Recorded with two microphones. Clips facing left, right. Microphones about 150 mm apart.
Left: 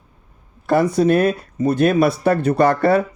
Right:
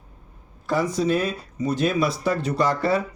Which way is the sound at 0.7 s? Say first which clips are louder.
Left 7 dB; 60° left (ahead or behind).